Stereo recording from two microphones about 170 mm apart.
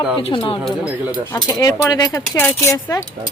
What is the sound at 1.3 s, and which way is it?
A woman's voice, 20° left (ahead or behind).